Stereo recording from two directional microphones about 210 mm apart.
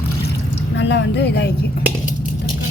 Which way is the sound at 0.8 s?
55° left (ahead or behind).